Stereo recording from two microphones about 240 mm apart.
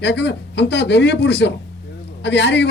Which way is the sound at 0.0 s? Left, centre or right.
Left.